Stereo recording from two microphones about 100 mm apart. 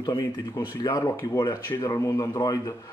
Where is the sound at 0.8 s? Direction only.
50° left (ahead or behind).